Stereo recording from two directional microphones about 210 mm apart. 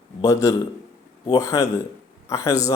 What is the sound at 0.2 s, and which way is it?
A man's voice, 15° left (ahead or behind).